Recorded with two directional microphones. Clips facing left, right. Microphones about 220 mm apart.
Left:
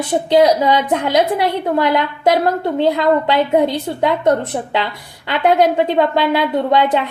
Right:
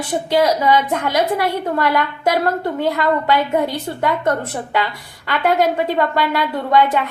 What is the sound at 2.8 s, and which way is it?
A woman's voice, 20° left (ahead or behind).